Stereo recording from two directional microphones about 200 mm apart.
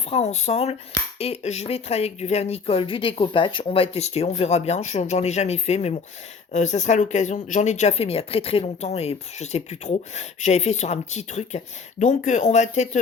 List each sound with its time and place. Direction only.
0.1 s speech: 35° left (ahead or behind)